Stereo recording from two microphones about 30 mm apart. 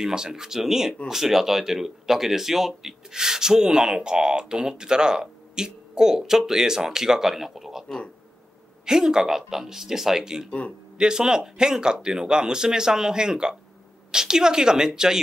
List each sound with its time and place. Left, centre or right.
0.0 s speech: right
3.1 s speech: centre
8.8 s speech: right